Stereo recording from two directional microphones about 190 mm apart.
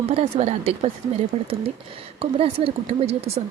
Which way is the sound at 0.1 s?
35° right (ahead or behind).